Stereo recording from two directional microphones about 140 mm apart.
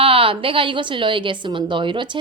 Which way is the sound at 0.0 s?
40° right (ahead or behind).